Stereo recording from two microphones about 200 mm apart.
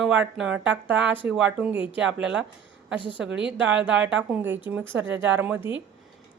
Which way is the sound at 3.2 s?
65° right (ahead or behind).